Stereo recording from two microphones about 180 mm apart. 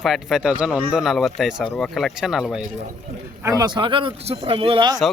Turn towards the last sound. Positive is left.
turn(degrees=-30)  # may be behind; listen again after turning